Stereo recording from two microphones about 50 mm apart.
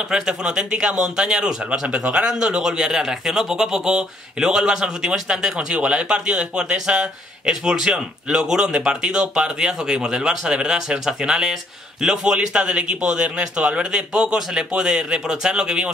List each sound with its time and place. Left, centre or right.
0.1 s a man's voice: centre